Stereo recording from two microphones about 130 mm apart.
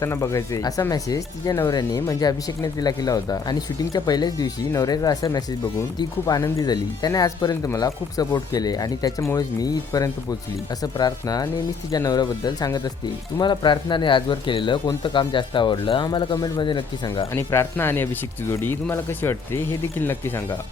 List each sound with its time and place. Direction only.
0.0 s speech: 20° left (ahead or behind); by 17.2 s 40° left (ahead or behind)
17.3 s speech: 20° left (ahead or behind)